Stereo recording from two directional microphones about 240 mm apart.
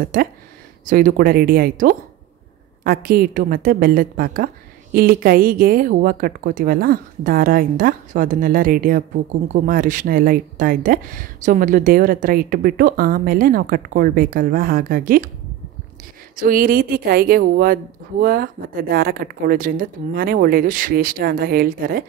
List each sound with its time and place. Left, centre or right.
0.0 s speech: right
16.3 s speech: right